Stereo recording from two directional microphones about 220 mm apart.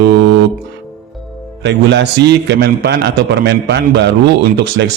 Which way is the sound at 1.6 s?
50° right (ahead or behind).